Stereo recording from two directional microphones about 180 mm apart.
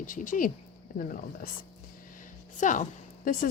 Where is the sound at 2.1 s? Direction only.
45° left (ahead or behind).